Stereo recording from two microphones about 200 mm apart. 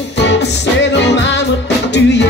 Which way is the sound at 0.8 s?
60° left (ahead or behind).